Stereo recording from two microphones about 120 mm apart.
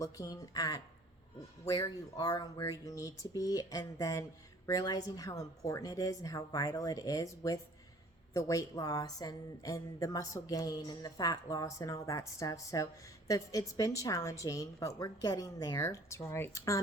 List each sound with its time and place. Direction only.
0.0 s a woman's voice: 30° left (ahead or behind)